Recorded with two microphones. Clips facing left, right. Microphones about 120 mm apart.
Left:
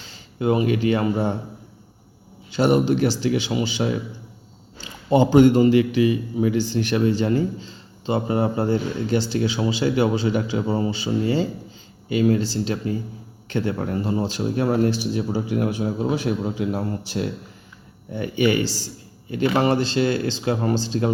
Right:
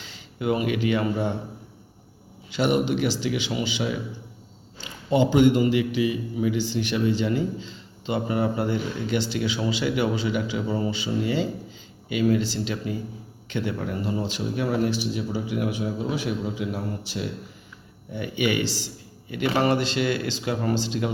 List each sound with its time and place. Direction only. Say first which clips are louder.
0.1 s speech: left 4 dB; 30° left (ahead or behind)
2.5 s a man's voice: left 4 dB; 35° left (ahead or behind)
18.1 s a man's voice: left 5 dB; 40° left (ahead or behind)